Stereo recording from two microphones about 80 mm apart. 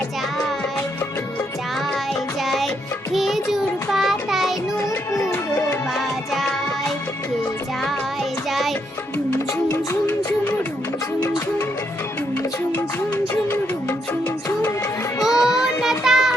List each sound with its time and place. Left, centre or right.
2.4 s music: centre
3.9 s child singing: centre
6.0 s music: centre
8.4 s music: centre
15.2 s child singing: centre